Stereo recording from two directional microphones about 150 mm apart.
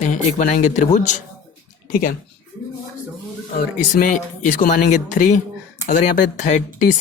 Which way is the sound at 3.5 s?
60° left (ahead or behind).